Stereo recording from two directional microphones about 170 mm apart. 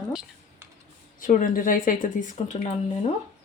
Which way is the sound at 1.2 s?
50° left (ahead or behind).